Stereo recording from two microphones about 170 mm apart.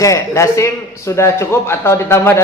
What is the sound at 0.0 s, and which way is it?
A man's voice, 20° left (ahead or behind).